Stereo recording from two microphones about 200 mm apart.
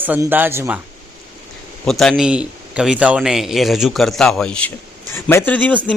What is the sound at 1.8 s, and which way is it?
A man's voice, centre (ahead or behind).